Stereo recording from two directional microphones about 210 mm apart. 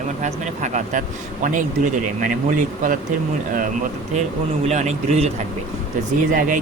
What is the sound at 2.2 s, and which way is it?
Speech, 40° right (ahead or behind).